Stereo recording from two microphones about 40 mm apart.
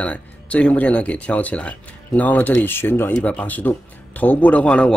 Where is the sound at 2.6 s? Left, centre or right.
Left.